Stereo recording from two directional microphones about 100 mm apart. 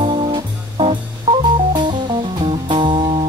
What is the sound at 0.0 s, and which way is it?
Music, 55° right (ahead or behind).